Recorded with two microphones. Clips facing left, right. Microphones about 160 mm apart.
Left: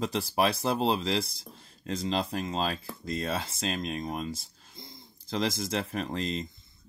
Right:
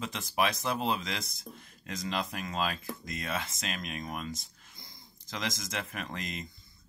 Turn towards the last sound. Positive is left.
turn(degrees=30)  # may be behind; listen again after turning